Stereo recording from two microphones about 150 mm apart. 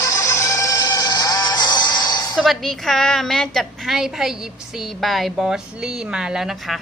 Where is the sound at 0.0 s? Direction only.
20° left (ahead or behind).